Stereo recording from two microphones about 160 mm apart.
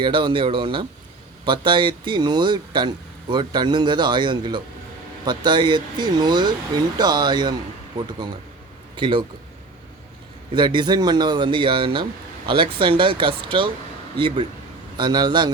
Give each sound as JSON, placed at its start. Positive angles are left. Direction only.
{"t": 0.0, "sound": "speech", "side_deg": -30}
{"t": 9.0, "sound": "a man's voice", "side_deg": -30}
{"t": 10.5, "sound": "speech", "side_deg": -30}